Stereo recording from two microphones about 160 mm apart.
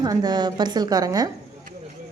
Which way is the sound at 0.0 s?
25° right (ahead or behind).